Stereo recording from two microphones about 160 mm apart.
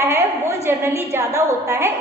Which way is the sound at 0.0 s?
15° right (ahead or behind).